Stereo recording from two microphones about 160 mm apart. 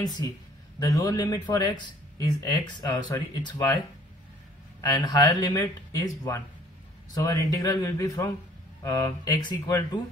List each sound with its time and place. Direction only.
0.2 s speech: 20° left (ahead or behind)
4.8 s speech: 25° left (ahead or behind)